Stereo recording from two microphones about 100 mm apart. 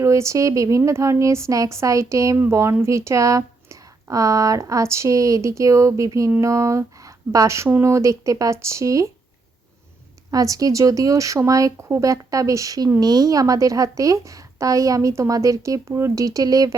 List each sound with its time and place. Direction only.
0.0 s a woman's voice: 30° right (ahead or behind)
10.3 s a woman's voice: 35° right (ahead or behind)